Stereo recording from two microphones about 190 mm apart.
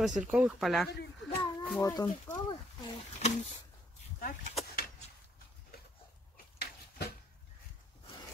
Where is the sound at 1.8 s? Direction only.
20° left (ahead or behind).